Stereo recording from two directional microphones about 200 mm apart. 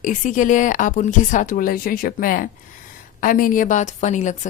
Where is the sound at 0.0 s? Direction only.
40° left (ahead or behind).